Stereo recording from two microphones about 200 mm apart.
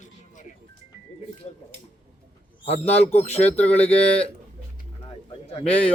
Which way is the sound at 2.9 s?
30° left (ahead or behind).